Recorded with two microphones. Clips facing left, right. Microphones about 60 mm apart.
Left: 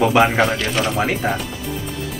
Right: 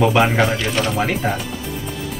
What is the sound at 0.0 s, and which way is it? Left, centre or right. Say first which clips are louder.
Speech: left 1 dB; centre.